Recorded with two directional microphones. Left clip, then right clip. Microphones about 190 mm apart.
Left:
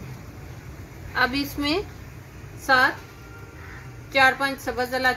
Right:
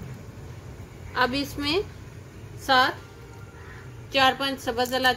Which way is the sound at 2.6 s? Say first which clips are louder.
Left 2 dB; 15° right (ahead or behind).